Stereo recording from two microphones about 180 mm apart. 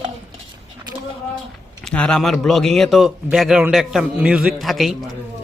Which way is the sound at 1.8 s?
5° left (ahead or behind).